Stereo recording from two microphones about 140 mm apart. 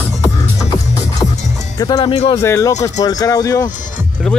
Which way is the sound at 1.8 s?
30° left (ahead or behind).